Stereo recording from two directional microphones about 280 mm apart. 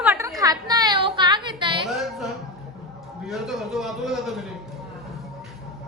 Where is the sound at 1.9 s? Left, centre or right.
Centre.